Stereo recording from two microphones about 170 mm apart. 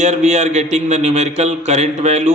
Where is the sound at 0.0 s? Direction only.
45° right (ahead or behind).